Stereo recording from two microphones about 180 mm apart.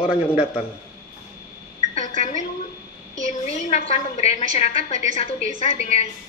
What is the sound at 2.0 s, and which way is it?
Telephone, 40° left (ahead or behind).